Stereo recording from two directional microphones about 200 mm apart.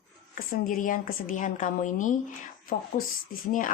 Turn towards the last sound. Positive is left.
turn(degrees=40)  # may be behind; listen again after turning